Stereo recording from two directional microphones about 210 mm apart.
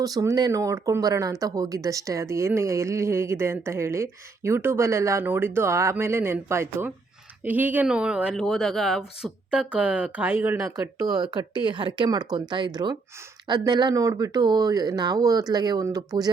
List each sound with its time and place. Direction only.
0.0 s speech: 15° right (ahead or behind)